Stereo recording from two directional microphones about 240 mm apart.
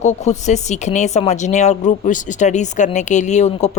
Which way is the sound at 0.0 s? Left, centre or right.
Left.